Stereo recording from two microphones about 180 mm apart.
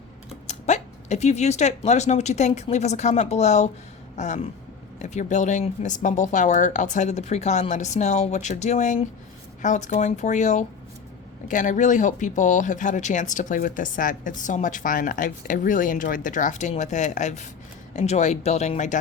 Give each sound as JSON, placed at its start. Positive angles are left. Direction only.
{"t": 0.4, "sound": "speech", "side_deg": 40}